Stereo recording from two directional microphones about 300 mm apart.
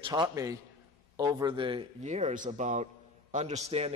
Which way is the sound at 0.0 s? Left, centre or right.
Centre.